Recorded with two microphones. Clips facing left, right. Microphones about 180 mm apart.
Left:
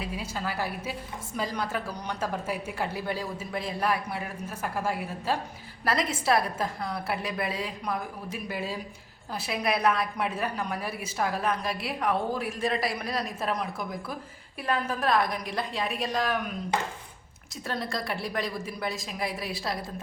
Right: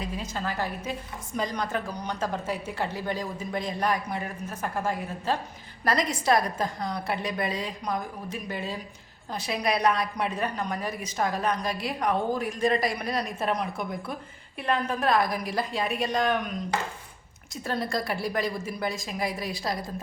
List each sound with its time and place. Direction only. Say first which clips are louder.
0.0 s a woman's voice: right 1 dB; 10° left (ahead or behind)
17.7 s a woman's voice: right 3 dB; centre (ahead or behind)